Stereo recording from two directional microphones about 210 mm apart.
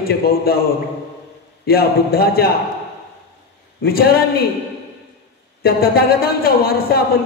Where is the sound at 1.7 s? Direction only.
45° left (ahead or behind).